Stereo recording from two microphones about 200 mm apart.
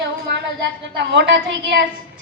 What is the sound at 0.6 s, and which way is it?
A woman's voice, 60° right (ahead or behind).